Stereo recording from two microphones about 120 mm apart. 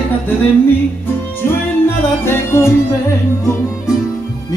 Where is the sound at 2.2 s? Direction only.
20° left (ahead or behind).